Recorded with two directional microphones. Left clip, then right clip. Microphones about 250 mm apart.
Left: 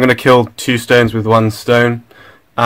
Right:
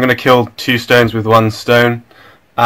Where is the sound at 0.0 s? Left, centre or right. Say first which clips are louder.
Left 1 dB; left.